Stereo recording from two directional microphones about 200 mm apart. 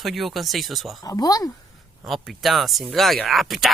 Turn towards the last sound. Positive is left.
turn(degrees=0)  # may be behind; listen again after turning